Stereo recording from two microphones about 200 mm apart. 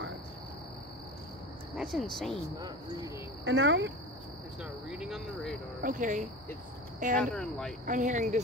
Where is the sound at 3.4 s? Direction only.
65° right (ahead or behind).